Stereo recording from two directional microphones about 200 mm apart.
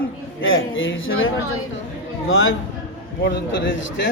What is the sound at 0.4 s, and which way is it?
A man's voice, 75° left (ahead or behind).